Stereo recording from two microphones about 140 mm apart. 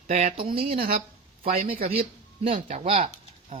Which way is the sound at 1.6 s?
45° right (ahead or behind).